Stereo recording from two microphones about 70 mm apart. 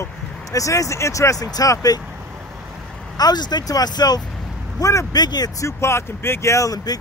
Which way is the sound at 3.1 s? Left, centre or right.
Left.